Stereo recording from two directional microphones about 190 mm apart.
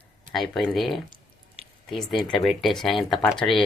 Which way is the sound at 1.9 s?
Centre (ahead or behind).